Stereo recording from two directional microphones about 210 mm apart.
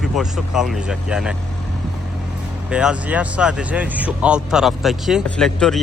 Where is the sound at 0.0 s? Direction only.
5° right (ahead or behind).